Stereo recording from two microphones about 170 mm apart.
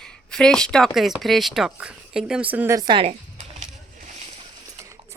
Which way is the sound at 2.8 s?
30° right (ahead or behind).